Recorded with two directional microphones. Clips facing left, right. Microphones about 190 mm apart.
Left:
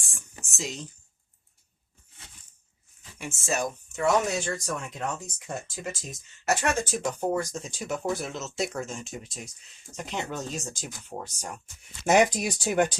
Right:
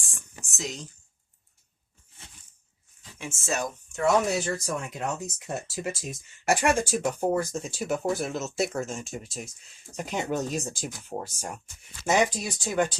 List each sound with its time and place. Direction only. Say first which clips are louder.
3.2 s speech: left 1 dB; 10° left (ahead or behind)
12.0 s speech: left 3 dB; 15° left (ahead or behind)